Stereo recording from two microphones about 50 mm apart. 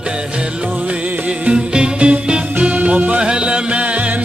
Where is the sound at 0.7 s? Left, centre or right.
Right.